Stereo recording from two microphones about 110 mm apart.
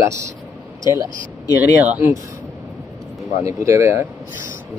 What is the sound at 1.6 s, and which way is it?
Speech, 15° right (ahead or behind).